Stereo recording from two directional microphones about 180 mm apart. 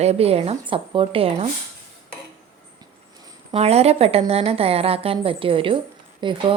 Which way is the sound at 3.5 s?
35° right (ahead or behind).